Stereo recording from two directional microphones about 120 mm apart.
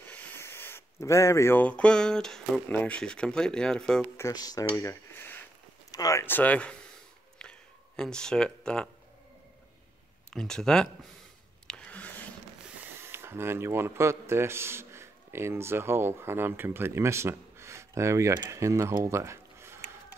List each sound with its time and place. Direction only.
0.1 s speech: 15° left (ahead or behind)
4.2 s speech: 30° left (ahead or behind)
5.9 s speech: 30° left (ahead or behind)
6.2 s speech: 15° left (ahead or behind)
7.3 s a sound: 5° left (ahead or behind)
10.3 s speech: 5° left (ahead or behind)
11.6 s a sound: 5° left (ahead or behind)
13.0 s speech: 20° right (ahead or behind)